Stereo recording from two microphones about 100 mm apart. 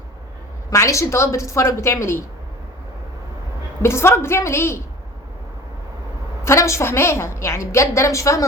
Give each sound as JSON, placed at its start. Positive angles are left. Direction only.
{"t": 0.7, "sound": "a woman's voice", "side_deg": 30}
{"t": 3.8, "sound": "a woman's voice", "side_deg": 25}
{"t": 6.4, "sound": "a woman's voice", "side_deg": 30}